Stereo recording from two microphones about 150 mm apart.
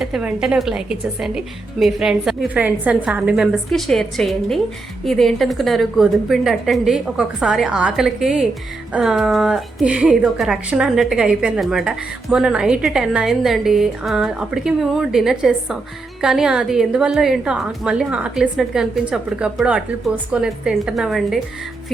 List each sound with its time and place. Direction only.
0.0 s a woman's voice: 5° right (ahead or behind)